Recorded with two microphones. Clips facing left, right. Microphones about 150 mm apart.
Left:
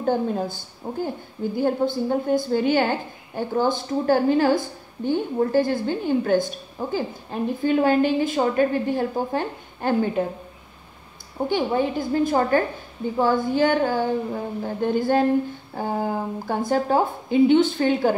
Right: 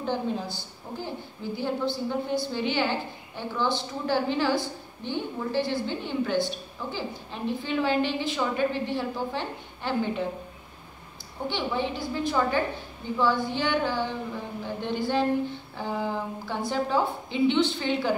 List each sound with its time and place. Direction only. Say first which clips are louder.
0.0 s a woman's voice: left 6 dB; 50° left (ahead or behind)
11.4 s a woman's voice: left 7 dB; 45° left (ahead or behind)